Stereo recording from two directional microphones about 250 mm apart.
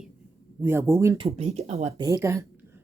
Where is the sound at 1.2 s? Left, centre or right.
Right.